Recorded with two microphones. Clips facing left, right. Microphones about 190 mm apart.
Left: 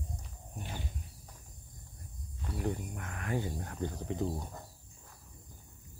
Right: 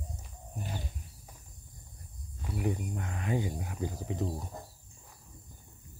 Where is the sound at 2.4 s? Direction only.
10° right (ahead or behind).